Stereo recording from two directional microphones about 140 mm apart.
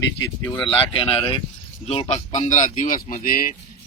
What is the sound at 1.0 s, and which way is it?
Speech, 40° left (ahead or behind).